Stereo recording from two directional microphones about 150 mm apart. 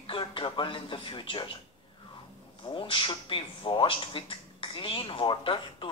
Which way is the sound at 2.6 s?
35° left (ahead or behind).